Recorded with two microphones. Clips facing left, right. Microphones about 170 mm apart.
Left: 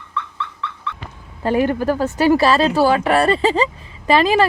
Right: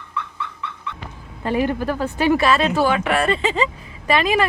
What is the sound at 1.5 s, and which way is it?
Speech, 40° left (ahead or behind).